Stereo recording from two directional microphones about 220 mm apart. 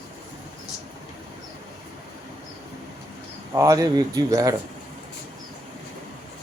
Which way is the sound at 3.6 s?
15° right (ahead or behind).